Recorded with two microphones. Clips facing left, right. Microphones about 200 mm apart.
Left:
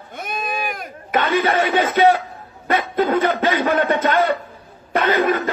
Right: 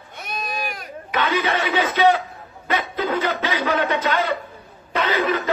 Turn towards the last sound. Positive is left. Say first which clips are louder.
# left 4 dB
turn(degrees=50)  # may be behind; listen again after turning